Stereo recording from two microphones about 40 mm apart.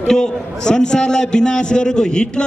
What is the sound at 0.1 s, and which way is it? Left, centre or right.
A man's voice, centre.